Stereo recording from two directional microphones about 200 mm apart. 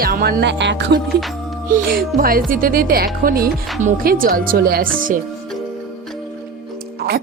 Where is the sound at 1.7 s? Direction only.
45° right (ahead or behind).